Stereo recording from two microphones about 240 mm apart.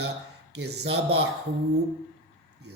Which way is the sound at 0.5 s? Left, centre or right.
Right.